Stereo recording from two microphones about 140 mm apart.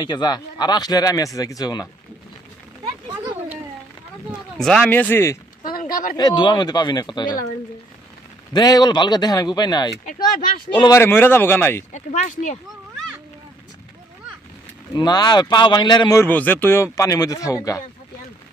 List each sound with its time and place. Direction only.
0.0 s speech: 30° left (ahead or behind)
4.6 s speech: 5° left (ahead or behind)
5.6 s a sound: 85° left
6.1 s speech: 30° left (ahead or behind)
8.5 s speech: 30° left (ahead or behind)
10.9 s speech: 15° left (ahead or behind)
11.9 s speech: 60° left (ahead or behind)
15.0 s speech: 30° left (ahead or behind)
16.3 s speech: 10° left (ahead or behind)